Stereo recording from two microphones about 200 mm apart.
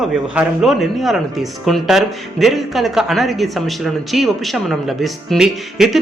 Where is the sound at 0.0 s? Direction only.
Centre (ahead or behind).